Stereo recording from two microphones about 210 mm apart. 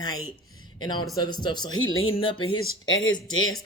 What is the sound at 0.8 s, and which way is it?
A man's voice, 20° left (ahead or behind).